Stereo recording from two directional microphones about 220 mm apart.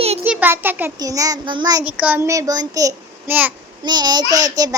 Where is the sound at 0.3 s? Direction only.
10° right (ahead or behind).